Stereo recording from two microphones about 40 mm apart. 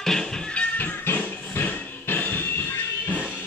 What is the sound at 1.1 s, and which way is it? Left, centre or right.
Music, left.